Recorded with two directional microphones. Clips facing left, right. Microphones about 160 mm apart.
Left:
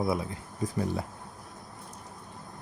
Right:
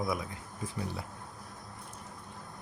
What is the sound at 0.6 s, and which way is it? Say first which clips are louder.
Speech: left 8 dB; 45° left (ahead or behind).